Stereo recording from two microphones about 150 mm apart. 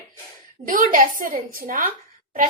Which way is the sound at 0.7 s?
65° right (ahead or behind).